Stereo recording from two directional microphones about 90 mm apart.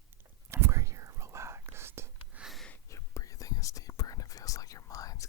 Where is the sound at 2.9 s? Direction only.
35° left (ahead or behind).